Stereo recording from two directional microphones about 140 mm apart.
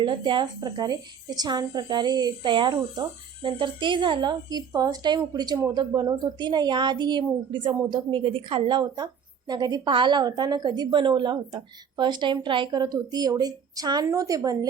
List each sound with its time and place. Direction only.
0.0 s a woman's voice: 35° right (ahead or behind)